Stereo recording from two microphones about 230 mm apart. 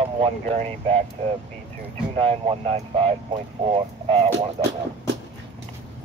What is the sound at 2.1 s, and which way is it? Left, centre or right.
Speech, right.